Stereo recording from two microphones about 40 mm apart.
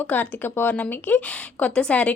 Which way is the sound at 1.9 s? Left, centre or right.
Left.